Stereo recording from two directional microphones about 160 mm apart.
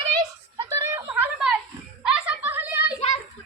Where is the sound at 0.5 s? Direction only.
20° right (ahead or behind).